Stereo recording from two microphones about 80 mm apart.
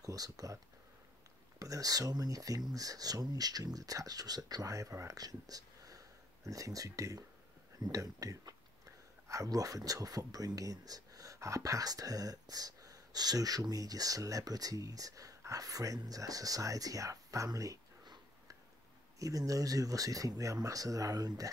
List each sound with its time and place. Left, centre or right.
0.0 s speech: right
1.6 s speech: right